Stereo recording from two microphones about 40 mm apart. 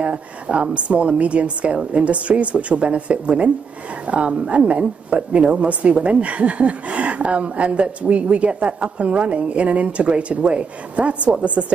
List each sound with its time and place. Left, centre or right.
0.0 s a woman's voice: right